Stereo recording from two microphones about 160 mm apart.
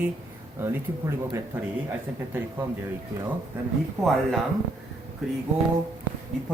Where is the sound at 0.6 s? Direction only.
15° right (ahead or behind).